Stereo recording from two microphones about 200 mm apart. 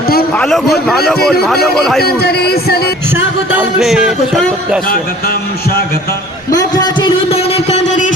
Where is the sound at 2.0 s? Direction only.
50° left (ahead or behind).